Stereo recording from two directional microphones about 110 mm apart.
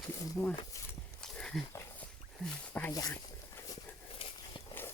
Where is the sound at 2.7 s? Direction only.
20° left (ahead or behind).